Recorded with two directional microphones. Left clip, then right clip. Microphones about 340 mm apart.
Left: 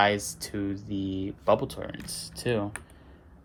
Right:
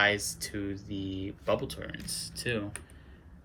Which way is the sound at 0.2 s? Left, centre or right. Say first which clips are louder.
Even; centre.